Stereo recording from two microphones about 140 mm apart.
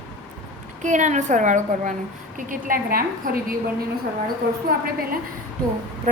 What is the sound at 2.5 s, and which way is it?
Speech, 85° right.